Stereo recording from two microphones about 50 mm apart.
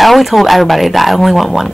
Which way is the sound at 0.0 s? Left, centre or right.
Centre.